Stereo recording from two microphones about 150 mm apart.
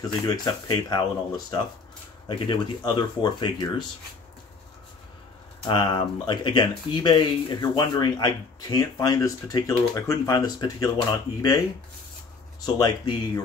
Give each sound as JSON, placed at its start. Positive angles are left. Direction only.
{"t": 0.3, "sound": "speech", "side_deg": 30}
{"t": 5.7, "sound": "speech", "side_deg": 35}
{"t": 12.5, "sound": "speech", "side_deg": 25}